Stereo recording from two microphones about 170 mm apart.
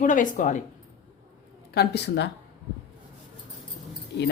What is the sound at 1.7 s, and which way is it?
Speech, 70° left (ahead or behind).